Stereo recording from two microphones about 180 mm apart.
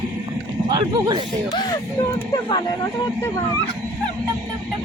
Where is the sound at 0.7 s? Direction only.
25° right (ahead or behind).